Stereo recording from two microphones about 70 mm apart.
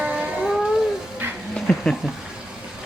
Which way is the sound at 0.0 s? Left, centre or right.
Centre.